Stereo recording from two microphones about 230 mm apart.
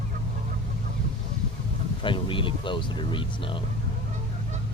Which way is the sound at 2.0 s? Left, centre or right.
Left.